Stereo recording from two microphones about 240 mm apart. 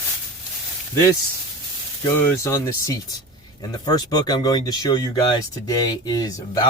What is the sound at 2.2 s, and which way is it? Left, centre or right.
Speech, centre.